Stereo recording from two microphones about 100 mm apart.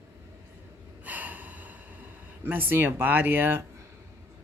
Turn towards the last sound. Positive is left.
turn(degrees=-20)  # may be behind; listen again after turning